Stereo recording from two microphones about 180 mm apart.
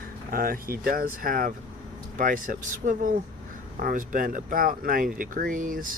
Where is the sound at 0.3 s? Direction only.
55° right (ahead or behind).